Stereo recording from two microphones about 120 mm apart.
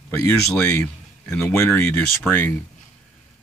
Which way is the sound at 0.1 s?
20° left (ahead or behind).